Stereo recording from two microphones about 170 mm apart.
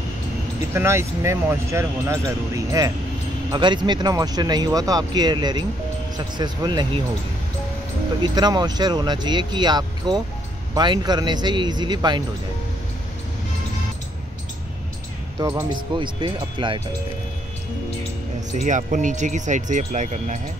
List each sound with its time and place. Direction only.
0.7 s speech: 15° right (ahead or behind)
8.2 s speech: 25° right (ahead or behind)
15.3 s speech: 20° right (ahead or behind)
18.5 s speech: 45° right (ahead or behind)